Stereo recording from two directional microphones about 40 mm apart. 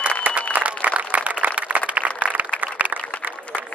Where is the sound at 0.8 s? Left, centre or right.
Right.